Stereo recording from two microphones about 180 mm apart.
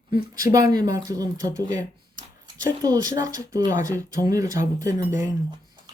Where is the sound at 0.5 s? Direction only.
20° right (ahead or behind).